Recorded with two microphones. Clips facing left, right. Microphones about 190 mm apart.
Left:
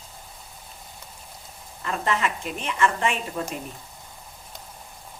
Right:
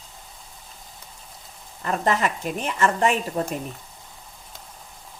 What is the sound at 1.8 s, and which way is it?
A woman's voice, 40° right (ahead or behind).